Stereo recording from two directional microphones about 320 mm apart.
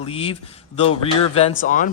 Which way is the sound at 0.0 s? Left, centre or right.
Centre.